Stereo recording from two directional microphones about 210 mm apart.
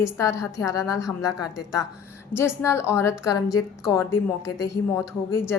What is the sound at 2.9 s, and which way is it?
A woman's voice, 15° left (ahead or behind).